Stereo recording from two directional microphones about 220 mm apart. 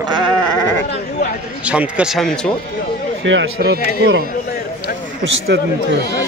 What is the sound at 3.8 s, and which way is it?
Speech, 40° left (ahead or behind).